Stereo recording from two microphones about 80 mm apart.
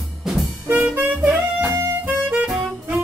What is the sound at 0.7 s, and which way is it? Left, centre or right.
Music, centre.